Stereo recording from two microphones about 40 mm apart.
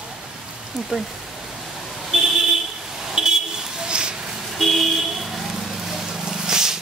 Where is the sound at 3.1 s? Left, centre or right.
Centre.